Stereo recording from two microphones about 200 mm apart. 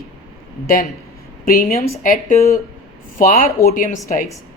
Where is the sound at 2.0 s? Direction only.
45° left (ahead or behind).